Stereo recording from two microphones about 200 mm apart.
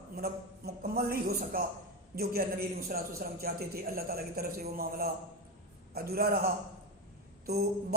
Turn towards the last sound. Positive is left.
turn(degrees=-50)  # may be behind; listen again after turning